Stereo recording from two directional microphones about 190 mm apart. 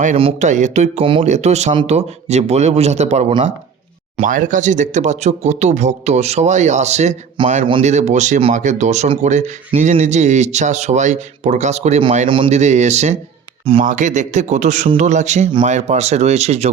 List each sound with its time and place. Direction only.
0.2 s speech: 35° right (ahead or behind)